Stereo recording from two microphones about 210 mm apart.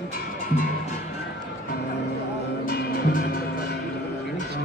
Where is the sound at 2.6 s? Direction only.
45° left (ahead or behind).